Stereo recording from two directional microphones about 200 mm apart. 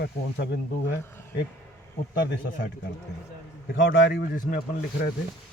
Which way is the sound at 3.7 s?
65° left (ahead or behind).